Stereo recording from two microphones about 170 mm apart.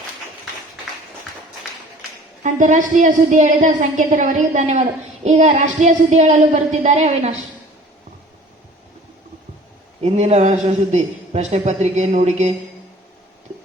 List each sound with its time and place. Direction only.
2.4 s a woman's voice: 50° right (ahead or behind)
10.0 s a man's voice: 40° right (ahead or behind)